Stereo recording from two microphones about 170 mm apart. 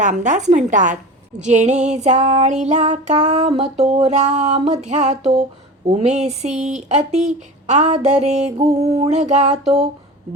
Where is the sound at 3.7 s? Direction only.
40° right (ahead or behind).